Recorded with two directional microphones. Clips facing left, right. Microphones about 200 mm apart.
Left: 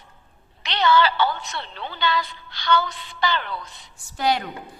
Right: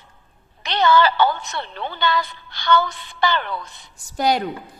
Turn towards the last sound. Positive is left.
turn(degrees=-40)  # may be behind; listen again after turning